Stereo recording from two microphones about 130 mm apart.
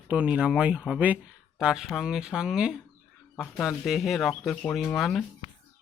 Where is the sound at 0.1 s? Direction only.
10° right (ahead or behind).